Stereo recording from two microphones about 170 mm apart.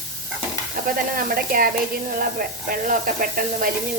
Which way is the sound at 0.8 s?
55° right (ahead or behind).